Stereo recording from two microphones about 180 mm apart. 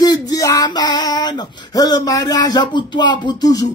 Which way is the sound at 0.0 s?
20° left (ahead or behind).